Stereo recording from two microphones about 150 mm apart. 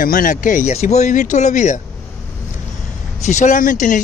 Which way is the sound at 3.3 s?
55° left (ahead or behind).